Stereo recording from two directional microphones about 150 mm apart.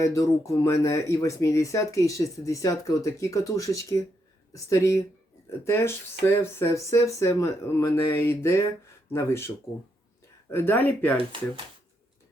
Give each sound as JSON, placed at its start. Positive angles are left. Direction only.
{"t": 0.0, "sound": "speech", "side_deg": 20}
{"t": 10.5, "sound": "speech", "side_deg": 15}
{"t": 11.2, "sound": "speech", "side_deg": -35}